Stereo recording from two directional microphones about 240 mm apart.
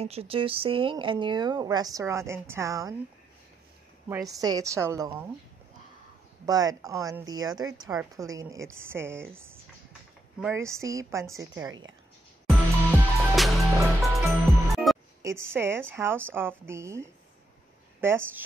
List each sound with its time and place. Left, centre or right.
0.0 s a woman's voice: right
4.1 s a woman's voice: centre
6.4 s a woman's voice: centre
12.4 s music: centre
15.2 s a woman's voice: centre